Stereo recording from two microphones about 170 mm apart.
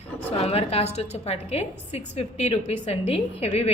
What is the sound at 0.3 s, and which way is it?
A woman's voice, 35° left (ahead or behind).